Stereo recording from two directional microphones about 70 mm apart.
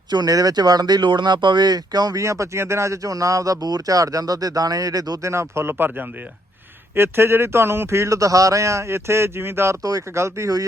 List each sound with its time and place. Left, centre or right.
0.1 s speech: right
2.2 s speech: right
5.2 s speech: right
5.7 s speech: right